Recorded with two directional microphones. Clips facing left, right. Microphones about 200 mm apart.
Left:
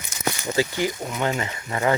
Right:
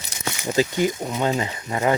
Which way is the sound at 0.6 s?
20° right (ahead or behind).